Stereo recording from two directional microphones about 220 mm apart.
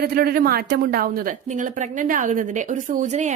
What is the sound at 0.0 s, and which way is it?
Speech, 45° right (ahead or behind).